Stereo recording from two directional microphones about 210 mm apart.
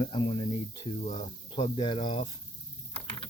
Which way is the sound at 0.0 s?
20° left (ahead or behind).